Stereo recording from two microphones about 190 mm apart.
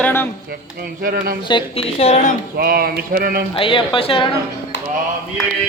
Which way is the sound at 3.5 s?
25° left (ahead or behind).